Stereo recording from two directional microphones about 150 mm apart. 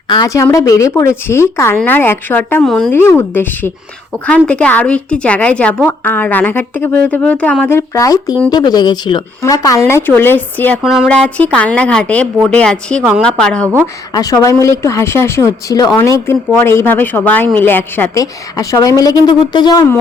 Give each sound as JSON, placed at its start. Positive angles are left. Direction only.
{"t": 0.1, "sound": "a woman's voice", "side_deg": 25}
{"t": 2.6, "sound": "speech", "side_deg": 0}
{"t": 2.9, "sound": "a woman's voice", "side_deg": 15}
{"t": 10.8, "sound": "a woman's voice", "side_deg": -5}
{"t": 14.1, "sound": "a woman's voice", "side_deg": 25}